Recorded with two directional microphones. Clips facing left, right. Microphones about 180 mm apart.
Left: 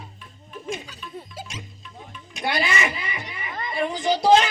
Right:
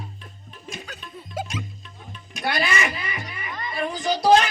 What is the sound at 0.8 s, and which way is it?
Music, 55° right (ahead or behind).